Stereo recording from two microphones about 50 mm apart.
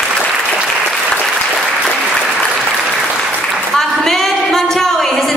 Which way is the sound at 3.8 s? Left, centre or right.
Centre.